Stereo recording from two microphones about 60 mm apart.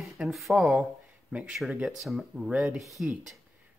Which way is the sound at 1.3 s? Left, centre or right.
Right.